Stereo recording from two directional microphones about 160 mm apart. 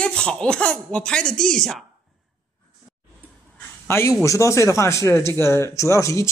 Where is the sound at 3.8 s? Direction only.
15° left (ahead or behind).